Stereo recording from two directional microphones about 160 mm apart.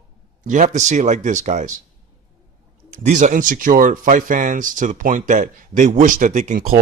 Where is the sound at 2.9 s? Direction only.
50° right (ahead or behind).